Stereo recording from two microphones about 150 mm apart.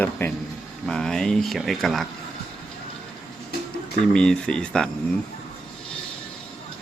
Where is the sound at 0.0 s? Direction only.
10° left (ahead or behind).